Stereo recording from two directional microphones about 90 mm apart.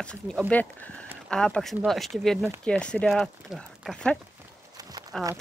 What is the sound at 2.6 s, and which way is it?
Speech, 10° left (ahead or behind).